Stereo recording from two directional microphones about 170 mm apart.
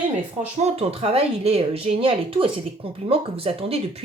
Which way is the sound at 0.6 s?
35° right (ahead or behind).